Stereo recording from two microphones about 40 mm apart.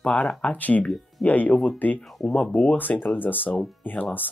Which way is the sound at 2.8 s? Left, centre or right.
Left.